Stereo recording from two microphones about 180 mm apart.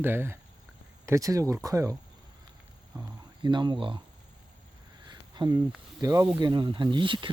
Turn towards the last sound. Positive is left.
turn(degrees=-25)  # may be behind; listen again after turning